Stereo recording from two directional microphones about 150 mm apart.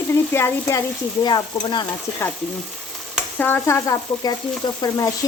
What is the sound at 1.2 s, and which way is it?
Stir, 30° left (ahead or behind).